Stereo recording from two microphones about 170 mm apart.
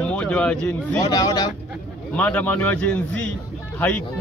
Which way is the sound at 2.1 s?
10° left (ahead or behind).